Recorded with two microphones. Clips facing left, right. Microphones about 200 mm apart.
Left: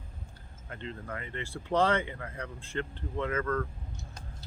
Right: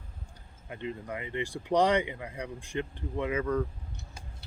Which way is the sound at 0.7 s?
15° right (ahead or behind).